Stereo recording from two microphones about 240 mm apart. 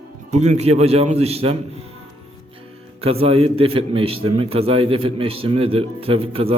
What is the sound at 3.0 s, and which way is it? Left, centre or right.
A man's voice, right.